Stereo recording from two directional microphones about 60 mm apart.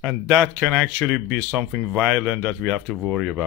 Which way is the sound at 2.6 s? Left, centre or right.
Centre.